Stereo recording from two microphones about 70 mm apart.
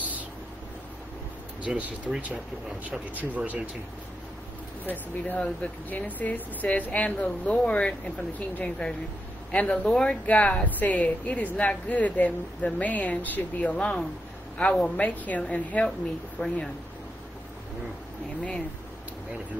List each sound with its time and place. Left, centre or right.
1.6 s speech: centre
4.8 s speech: left